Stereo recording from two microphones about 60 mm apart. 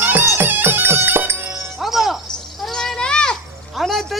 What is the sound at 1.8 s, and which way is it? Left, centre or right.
Music, centre.